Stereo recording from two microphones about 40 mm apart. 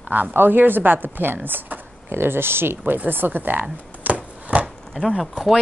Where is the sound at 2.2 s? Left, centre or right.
Right.